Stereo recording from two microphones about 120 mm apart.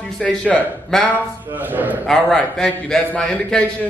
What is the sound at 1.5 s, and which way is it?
Speech, 15° right (ahead or behind).